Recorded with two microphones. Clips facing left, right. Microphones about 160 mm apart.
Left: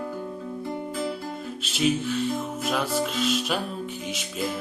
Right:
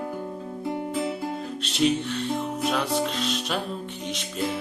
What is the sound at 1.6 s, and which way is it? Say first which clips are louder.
Music: right 1 dB; centre (ahead or behind).